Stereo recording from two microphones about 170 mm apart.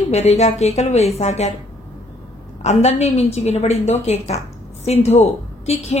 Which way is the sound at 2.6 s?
40° left (ahead or behind).